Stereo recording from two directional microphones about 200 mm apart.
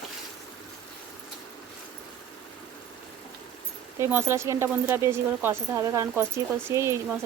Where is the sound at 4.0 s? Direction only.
10° right (ahead or behind).